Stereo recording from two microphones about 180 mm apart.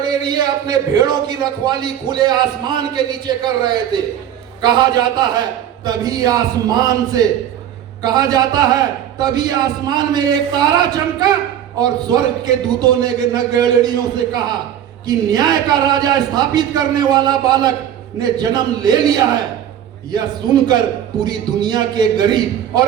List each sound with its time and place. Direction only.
0.0 s a man's voice: 25° right (ahead or behind)